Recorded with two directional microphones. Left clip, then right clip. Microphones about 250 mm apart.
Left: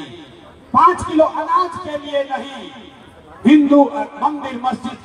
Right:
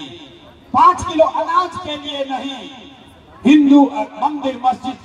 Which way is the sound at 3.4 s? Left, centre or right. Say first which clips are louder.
Even; right.